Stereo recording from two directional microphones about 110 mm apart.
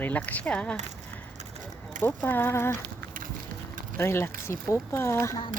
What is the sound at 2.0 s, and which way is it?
Speech, 15° left (ahead or behind).